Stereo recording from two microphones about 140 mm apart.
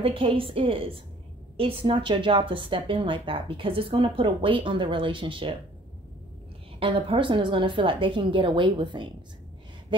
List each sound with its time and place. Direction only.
0.0 s a woman's voice: 40° right (ahead or behind)
6.8 s a woman's voice: 40° right (ahead or behind)